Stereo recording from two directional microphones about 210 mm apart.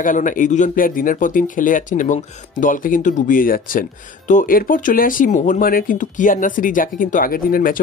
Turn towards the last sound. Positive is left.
turn(degrees=40)  # may be behind; listen again after turning